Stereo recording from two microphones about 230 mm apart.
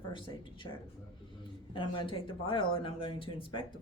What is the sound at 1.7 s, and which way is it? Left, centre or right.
Speech, left.